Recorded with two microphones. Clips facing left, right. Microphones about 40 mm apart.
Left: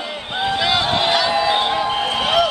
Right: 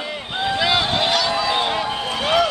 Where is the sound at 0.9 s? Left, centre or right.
Centre.